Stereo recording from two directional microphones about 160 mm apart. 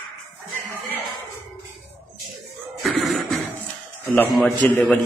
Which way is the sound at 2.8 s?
Centre (ahead or behind).